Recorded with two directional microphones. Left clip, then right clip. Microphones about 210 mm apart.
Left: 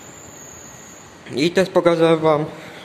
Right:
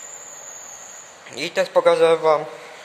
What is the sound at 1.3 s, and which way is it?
Speech, 5° left (ahead or behind).